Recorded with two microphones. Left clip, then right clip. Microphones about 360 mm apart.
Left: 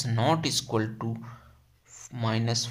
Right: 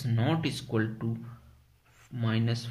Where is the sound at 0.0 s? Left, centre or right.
Centre.